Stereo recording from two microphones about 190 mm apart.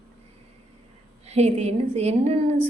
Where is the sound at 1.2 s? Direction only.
35° right (ahead or behind).